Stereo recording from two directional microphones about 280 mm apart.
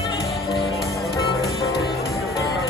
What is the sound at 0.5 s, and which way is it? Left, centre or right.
Music, centre.